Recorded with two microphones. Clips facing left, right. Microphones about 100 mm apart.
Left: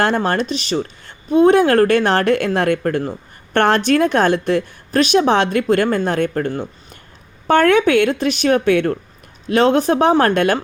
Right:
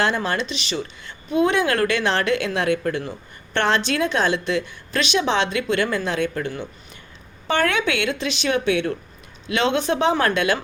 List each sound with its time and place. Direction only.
0.0 s speech: 50° left (ahead or behind)